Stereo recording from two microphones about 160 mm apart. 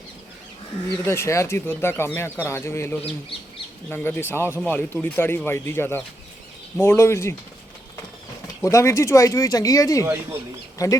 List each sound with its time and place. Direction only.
1.0 s speech: 15° left (ahead or behind)
8.6 s speech: 15° left (ahead or behind)